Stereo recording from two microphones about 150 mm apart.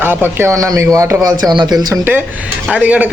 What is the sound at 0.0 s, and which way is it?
A man's voice, 15° right (ahead or behind).